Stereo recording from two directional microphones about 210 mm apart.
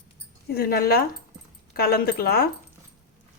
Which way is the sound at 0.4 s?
45° left (ahead or behind).